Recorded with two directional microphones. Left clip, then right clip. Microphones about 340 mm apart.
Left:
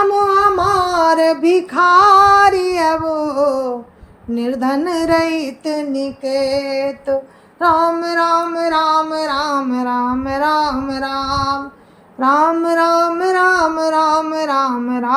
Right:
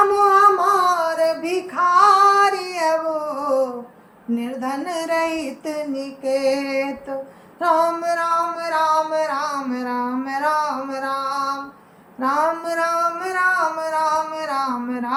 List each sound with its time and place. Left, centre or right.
0.3 s music: centre
7.6 s female singing: centre
8.2 s music: centre
12.2 s female singing: centre